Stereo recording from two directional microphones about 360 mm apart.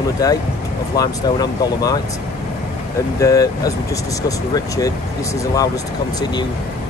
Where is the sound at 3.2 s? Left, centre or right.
Centre.